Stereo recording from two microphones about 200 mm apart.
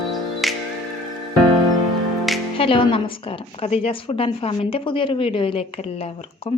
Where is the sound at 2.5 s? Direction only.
25° left (ahead or behind).